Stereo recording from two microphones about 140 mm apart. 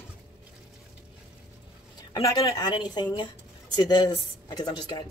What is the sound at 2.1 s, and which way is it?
A woman's voice, 25° left (ahead or behind).